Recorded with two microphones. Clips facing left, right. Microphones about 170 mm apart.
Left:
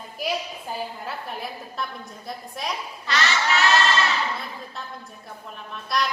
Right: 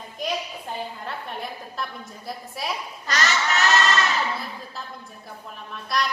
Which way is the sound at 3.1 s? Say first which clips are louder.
Left 1 dB; 40° right (ahead or behind).